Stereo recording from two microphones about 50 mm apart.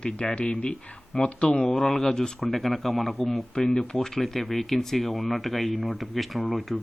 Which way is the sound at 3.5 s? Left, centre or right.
Centre.